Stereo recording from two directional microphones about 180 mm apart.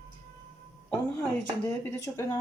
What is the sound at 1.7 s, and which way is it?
Speech, 15° left (ahead or behind).